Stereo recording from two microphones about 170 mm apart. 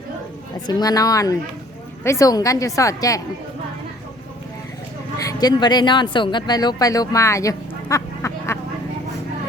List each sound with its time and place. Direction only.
0.7 s a woman's voice: 20° left (ahead or behind)
5.2 s speech: 25° left (ahead or behind)